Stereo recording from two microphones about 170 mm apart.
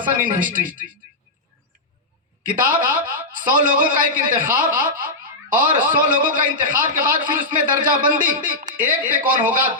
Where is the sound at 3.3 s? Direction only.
55° right (ahead or behind).